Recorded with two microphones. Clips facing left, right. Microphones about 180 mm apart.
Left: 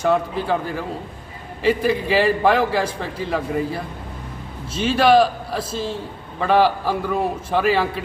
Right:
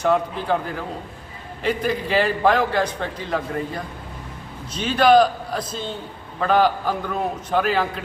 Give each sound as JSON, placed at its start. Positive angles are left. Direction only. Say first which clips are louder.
{"t": 0.0, "sound": "a man's voice", "louder": "left 1 dB", "side_deg": 5}